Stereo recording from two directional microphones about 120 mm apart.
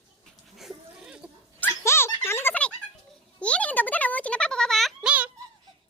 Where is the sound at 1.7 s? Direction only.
20° left (ahead or behind); by 5.1 s centre (ahead or behind).